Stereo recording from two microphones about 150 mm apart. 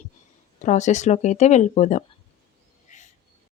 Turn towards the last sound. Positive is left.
turn(degrees=55)  # may be behind; listen again after turning